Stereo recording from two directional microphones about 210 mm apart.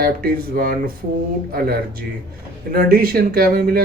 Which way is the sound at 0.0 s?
45° right (ahead or behind).